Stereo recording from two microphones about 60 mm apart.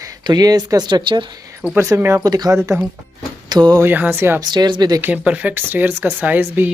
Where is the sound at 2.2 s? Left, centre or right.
Right.